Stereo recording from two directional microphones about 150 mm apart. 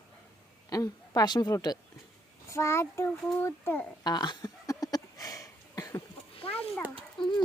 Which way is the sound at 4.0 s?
30° left (ahead or behind).